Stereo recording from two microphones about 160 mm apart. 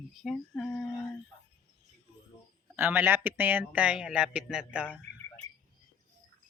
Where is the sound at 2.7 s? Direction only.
15° right (ahead or behind).